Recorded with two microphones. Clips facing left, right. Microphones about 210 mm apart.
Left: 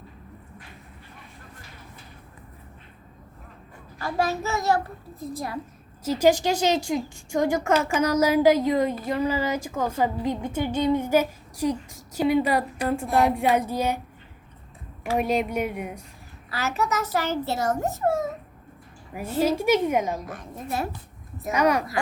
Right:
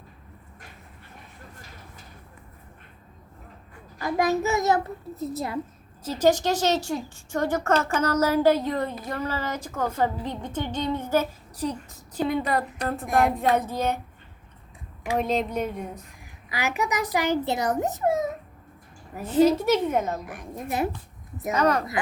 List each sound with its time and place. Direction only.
3.9 s a child's voice: 15° right (ahead or behind)
6.1 s a woman's voice: 10° left (ahead or behind)
15.1 s a woman's voice: 10° left (ahead or behind)
16.5 s a child's voice: 15° right (ahead or behind)
19.1 s a woman's voice: 10° left (ahead or behind)
20.2 s a child's voice: 15° right (ahead or behind)
21.5 s a woman's voice: 10° left (ahead or behind)